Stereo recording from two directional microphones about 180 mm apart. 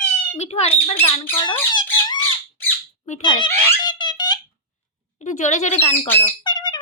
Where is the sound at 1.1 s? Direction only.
30° left (ahead or behind).